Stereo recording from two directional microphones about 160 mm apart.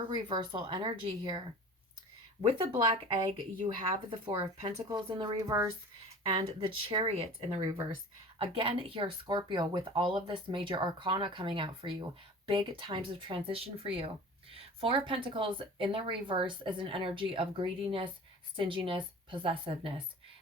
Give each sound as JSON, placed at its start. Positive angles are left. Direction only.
{"t": 0.1, "sound": "speech", "side_deg": -30}
{"t": 5.5, "sound": "speech", "side_deg": -15}
{"t": 6.2, "sound": "speech", "side_deg": -35}